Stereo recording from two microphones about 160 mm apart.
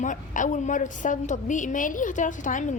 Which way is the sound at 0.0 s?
50° left (ahead or behind).